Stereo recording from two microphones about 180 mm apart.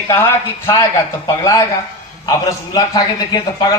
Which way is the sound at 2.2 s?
20° left (ahead or behind).